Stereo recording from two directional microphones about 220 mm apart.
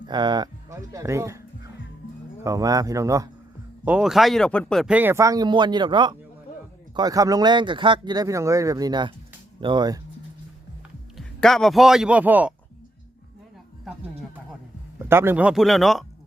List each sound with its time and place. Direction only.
0.0 s speech: 20° right (ahead or behind)
3.8 s speech: 5° right (ahead or behind); by 10.0 s 20° right (ahead or behind)
11.2 s a man's voice: centre (ahead or behind)
15.1 s a man's voice: 10° right (ahead or behind)